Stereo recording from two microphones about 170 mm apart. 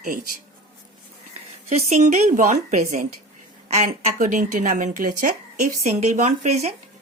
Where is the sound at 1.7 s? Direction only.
45° right (ahead or behind).